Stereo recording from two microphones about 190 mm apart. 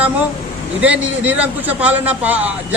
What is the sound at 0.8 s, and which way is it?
A man's voice, 5° right (ahead or behind).